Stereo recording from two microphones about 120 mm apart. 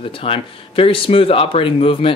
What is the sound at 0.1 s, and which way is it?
Speech, 50° left (ahead or behind).